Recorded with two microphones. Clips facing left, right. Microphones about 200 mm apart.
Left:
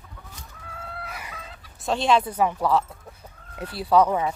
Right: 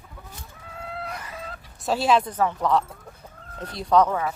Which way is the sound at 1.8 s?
5° right (ahead or behind).